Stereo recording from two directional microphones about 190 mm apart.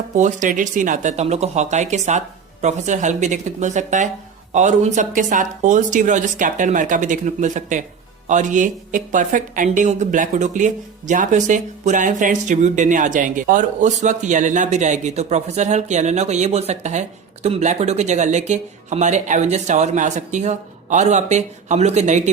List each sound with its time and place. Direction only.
0.2 s a woman's voice: 40° right (ahead or behind)